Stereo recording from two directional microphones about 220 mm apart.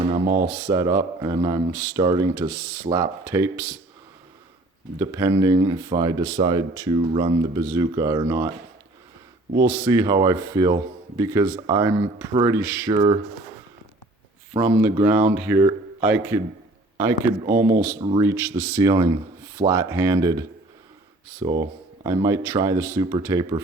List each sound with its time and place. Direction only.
0.1 s speech: 15° right (ahead or behind)
4.9 s speech: 15° right (ahead or behind)
9.6 s speech: 15° right (ahead or behind)
14.9 s a man's voice: 10° right (ahead or behind)